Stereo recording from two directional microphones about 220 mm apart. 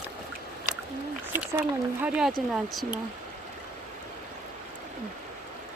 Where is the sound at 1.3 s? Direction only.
10° right (ahead or behind).